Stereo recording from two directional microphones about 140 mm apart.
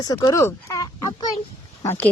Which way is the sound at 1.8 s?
15° left (ahead or behind).